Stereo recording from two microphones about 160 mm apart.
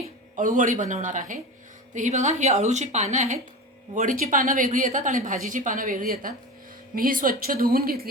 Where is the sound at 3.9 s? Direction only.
60° right (ahead or behind).